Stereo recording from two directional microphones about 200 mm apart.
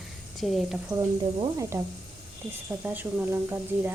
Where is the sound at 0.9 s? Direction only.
20° right (ahead or behind).